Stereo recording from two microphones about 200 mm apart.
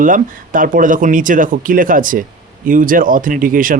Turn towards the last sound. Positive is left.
turn(degrees=-45)  # may be behind; listen again after turning